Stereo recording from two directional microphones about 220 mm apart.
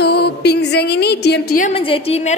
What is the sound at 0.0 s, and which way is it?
A woman's voice, 50° left (ahead or behind).